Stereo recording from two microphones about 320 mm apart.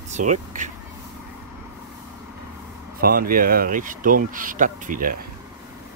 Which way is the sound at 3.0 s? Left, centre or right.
Right.